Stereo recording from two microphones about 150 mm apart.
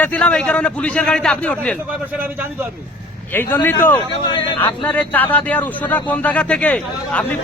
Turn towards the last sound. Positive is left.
turn(degrees=10)  # may be behind; listen again after turning